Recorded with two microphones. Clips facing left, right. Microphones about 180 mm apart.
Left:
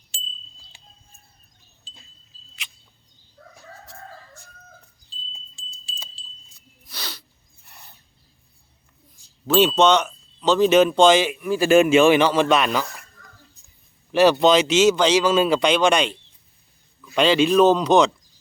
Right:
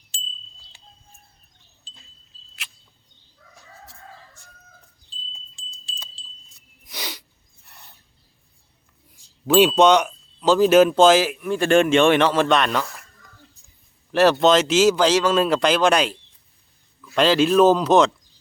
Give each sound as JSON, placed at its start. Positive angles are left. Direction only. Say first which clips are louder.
{"t": 0.1, "sound": "wind chime", "louder": "even", "side_deg": 0}
{"t": 2.6, "sound": "a sound", "louder": "even", "side_deg": -5}
{"t": 3.4, "sound": "chicken", "louder": "left 7 dB", "side_deg": 55}
{"t": 5.3, "sound": "wind chime", "louder": "even", "side_deg": 0}
{"t": 6.8, "sound": "sneeze", "louder": "right 3 dB", "side_deg": -15}
{"t": 7.6, "sound": "a sound", "louder": "left 1 dB", "side_deg": 0}
{"t": 9.6, "sound": "speech", "louder": "right 2 dB", "side_deg": -10}
{"t": 14.1, "sound": "speech", "louder": "even", "side_deg": 0}